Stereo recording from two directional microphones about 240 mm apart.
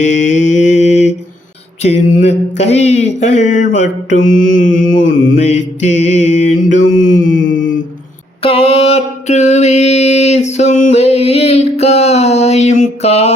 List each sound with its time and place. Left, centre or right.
0.0 s mantra: left
8.4 s mantra: left